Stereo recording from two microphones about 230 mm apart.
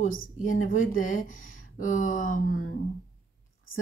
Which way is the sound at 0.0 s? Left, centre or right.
Left.